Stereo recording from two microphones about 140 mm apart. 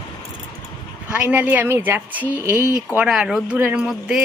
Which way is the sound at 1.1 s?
10° right (ahead or behind).